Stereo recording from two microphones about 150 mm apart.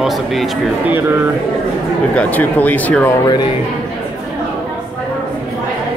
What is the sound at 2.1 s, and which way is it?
Speech, 10° left (ahead or behind).